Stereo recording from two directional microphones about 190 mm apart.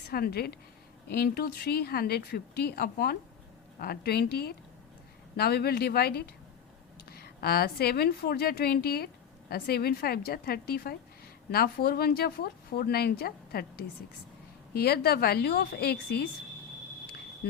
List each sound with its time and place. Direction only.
0.1 s a woman's voice: 55° left (ahead or behind)
14.7 s a woman's voice: 55° left (ahead or behind)